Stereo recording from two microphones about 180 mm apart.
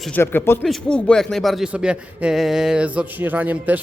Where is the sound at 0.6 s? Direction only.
5° left (ahead or behind).